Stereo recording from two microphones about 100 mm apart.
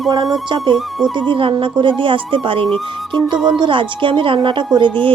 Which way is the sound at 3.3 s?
50° right (ahead or behind).